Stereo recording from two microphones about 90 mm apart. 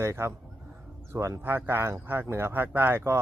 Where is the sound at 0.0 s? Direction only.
30° right (ahead or behind).